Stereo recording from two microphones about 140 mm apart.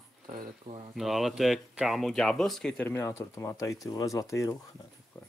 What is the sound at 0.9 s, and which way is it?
Speech, centre (ahead or behind).